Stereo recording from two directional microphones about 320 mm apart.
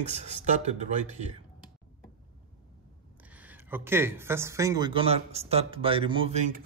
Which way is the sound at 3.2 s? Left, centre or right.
Centre.